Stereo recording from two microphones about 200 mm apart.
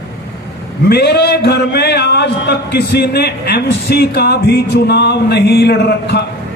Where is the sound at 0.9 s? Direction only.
55° left (ahead or behind).